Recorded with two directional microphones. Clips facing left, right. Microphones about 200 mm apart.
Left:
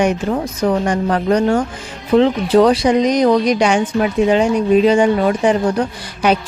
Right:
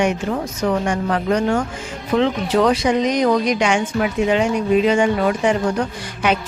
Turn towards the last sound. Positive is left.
turn(degrees=35)  # may be behind; listen again after turning